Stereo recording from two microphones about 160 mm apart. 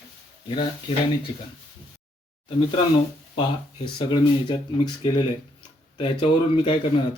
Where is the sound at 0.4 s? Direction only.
35° left (ahead or behind).